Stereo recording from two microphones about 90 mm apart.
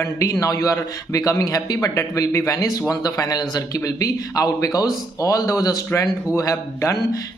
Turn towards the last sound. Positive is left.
turn(degrees=35)  # may be behind; listen again after turning